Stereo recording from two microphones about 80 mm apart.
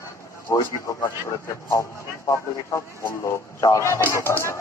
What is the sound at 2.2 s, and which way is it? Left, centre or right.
Speech, left.